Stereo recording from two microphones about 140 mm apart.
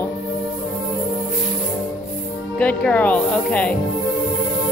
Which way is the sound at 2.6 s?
10° left (ahead or behind).